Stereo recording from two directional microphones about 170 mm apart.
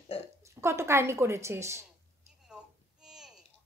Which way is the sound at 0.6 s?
15° right (ahead or behind).